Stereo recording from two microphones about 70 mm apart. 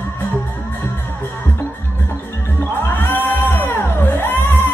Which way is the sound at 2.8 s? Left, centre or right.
Left.